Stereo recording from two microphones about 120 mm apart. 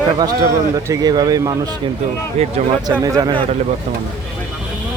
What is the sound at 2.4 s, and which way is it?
Speech, 60° right (ahead or behind).